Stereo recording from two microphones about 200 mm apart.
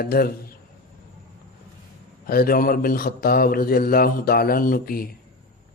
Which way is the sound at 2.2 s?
50° left (ahead or behind).